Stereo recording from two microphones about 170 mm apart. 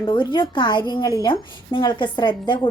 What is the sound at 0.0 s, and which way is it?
A woman's voice, 25° left (ahead or behind).